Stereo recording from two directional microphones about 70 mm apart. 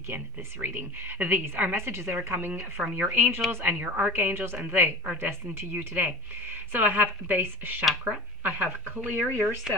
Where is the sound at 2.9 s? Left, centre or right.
Right.